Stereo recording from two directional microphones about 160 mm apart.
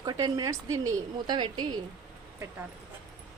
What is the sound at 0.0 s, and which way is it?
A woman's voice, 25° right (ahead or behind).